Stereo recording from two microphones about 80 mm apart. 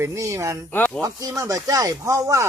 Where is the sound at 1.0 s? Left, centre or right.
Right.